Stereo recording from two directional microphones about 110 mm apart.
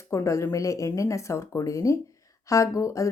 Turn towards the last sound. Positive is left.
turn(degrees=30)  # may be behind; listen again after turning